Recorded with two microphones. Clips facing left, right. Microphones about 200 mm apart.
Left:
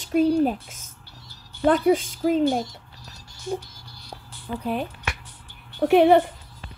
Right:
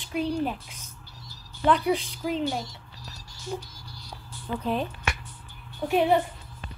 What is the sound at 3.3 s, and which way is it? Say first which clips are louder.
Music: left 5 dB; 55° left (ahead or behind).